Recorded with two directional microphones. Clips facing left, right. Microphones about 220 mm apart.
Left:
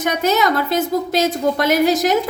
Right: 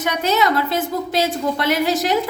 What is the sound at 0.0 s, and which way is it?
A woman's voice, 45° left (ahead or behind).